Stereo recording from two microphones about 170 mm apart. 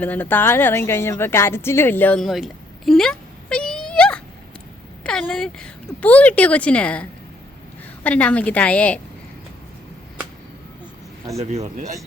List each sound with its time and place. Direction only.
0.0 s a woman's voice: 10° left (ahead or behind)
11.3 s speech: 40° right (ahead or behind)